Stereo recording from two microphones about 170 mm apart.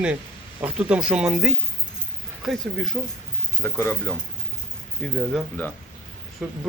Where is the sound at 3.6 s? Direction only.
15° left (ahead or behind).